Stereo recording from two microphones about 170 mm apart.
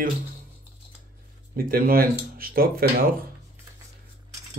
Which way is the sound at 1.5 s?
60° right (ahead or behind).